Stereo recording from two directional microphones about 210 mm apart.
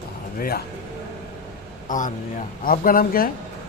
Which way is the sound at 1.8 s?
40° left (ahead or behind).